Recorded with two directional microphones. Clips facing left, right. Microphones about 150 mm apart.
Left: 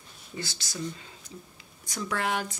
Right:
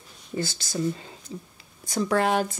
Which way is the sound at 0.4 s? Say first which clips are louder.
Right 8 dB; 50° right (ahead or behind).